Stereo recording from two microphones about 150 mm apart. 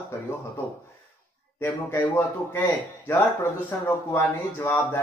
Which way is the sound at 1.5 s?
15° left (ahead or behind).